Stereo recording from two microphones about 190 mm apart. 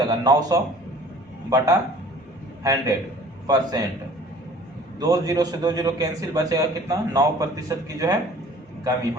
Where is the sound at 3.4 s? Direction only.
20° right (ahead or behind).